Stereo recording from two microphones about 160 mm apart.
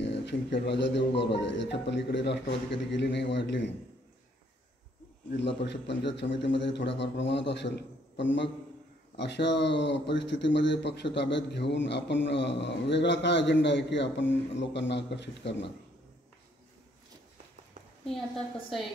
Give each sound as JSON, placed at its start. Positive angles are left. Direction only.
{"t": 0.0, "sound": "speech", "side_deg": 90}
{"t": 5.3, "sound": "speech", "side_deg": 90}
{"t": 9.1, "sound": "speech", "side_deg": 90}
{"t": 18.0, "sound": "a woman's voice", "side_deg": 0}